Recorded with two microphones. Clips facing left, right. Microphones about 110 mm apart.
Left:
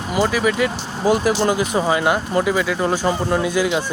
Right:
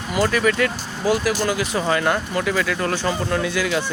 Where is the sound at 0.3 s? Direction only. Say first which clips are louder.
Left 1 dB; 10° left (ahead or behind).